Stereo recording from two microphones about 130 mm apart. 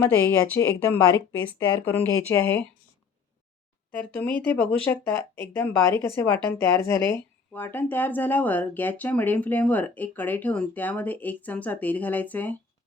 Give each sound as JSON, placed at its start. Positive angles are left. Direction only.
{"t": 0.9, "sound": "speech", "side_deg": 15}
{"t": 3.9, "sound": "speech", "side_deg": 10}